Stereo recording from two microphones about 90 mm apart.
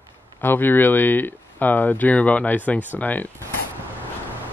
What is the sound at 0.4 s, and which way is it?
Speech, 20° left (ahead or behind).